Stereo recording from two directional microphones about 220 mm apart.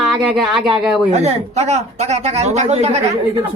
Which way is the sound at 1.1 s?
30° right (ahead or behind).